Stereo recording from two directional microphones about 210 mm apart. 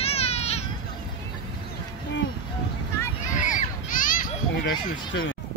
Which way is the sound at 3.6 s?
40° left (ahead or behind).